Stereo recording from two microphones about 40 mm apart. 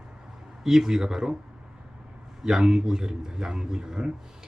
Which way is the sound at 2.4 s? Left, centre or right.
Centre.